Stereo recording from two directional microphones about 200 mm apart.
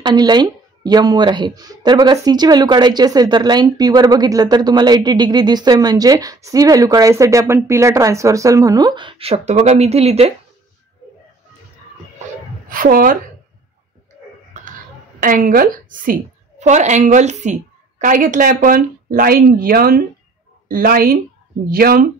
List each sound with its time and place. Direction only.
0.0 s speech: 20° right (ahead or behind)
12.6 s a woman's voice: 45° right (ahead or behind)
15.1 s a woman's voice: 45° right (ahead or behind)